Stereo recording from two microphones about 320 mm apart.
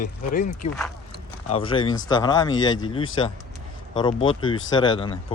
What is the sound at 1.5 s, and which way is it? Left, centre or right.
Speech, centre.